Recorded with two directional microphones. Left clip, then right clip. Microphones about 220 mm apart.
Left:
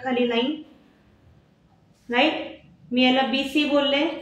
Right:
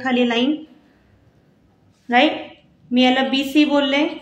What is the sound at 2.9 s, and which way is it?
Speech, 55° right (ahead or behind).